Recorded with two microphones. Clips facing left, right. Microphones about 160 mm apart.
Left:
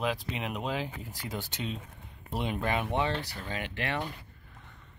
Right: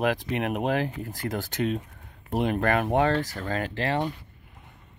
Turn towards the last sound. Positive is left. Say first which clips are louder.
# right 7 dB
turn(degrees=-35)  # may be behind; listen again after turning